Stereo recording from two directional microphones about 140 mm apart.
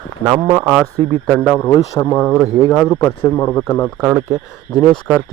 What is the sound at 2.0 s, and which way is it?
Speech, 5° left (ahead or behind).